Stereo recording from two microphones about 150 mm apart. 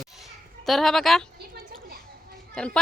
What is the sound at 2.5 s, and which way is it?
Speech, 5° left (ahead or behind).